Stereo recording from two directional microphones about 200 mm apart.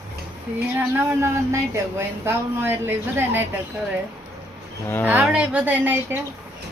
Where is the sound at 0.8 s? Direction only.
10° right (ahead or behind).